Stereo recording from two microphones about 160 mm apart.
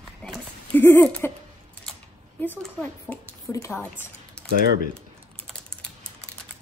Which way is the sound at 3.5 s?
20° left (ahead or behind).